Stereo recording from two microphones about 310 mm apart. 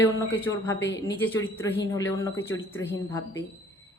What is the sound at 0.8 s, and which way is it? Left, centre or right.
Speech, left.